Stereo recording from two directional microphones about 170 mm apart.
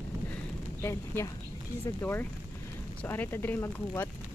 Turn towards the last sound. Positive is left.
turn(degrees=10)  # may be behind; listen again after turning